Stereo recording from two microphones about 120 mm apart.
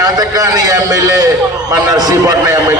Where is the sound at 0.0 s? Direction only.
30° right (ahead or behind).